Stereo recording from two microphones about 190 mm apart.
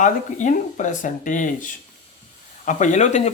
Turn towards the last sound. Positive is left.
turn(degrees=40)  # may be behind; listen again after turning